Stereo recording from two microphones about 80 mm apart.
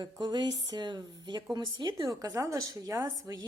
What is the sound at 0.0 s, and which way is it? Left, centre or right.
Speech, right.